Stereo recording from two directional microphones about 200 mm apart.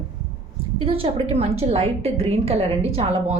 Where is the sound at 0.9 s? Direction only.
30° right (ahead or behind).